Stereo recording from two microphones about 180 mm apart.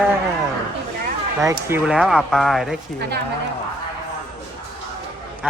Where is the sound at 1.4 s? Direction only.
15° right (ahead or behind).